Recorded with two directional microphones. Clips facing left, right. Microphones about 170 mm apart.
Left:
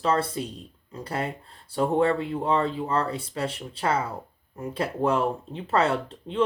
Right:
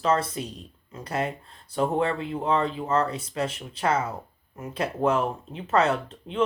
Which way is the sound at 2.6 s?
30° left (ahead or behind).